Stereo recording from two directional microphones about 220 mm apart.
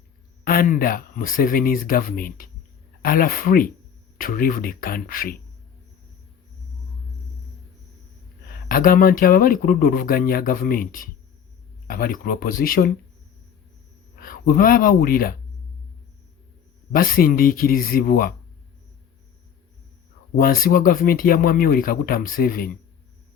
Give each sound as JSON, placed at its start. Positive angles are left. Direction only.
{"t": 0.4, "sound": "speech", "side_deg": 40}
{"t": 8.7, "sound": "speech", "side_deg": 40}
{"t": 14.2, "sound": "speech", "side_deg": 40}
{"t": 16.9, "sound": "speech", "side_deg": 40}
{"t": 20.3, "sound": "speech", "side_deg": 40}